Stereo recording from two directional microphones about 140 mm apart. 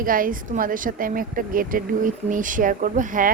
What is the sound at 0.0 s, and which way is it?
A woman's voice, 85° right.